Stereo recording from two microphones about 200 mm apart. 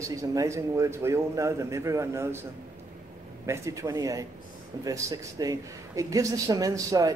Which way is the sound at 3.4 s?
15° right (ahead or behind).